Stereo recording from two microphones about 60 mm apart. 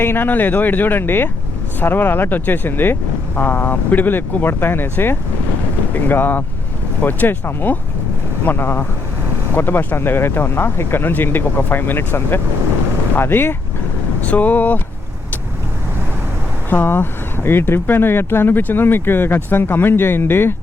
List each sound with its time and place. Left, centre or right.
0.0 s speech: left
14.2 s speech: left
16.6 s speech: left